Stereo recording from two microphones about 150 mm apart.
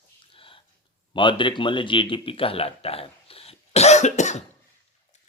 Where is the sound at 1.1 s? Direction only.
35° left (ahead or behind).